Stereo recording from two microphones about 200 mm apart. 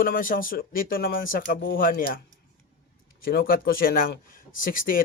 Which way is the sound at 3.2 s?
45° left (ahead or behind).